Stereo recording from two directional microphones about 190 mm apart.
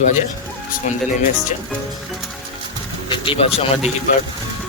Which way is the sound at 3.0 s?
30° left (ahead or behind).